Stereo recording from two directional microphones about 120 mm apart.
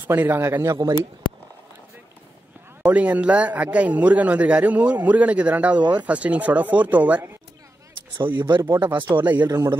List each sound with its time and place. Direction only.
0.0 s speech: 15° right (ahead or behind)
2.8 s a man's voice: 10° right (ahead or behind)
8.4 s speech: 40° right (ahead or behind)
8.8 s a man's voice: 15° right (ahead or behind)
9.4 s speech: 35° right (ahead or behind)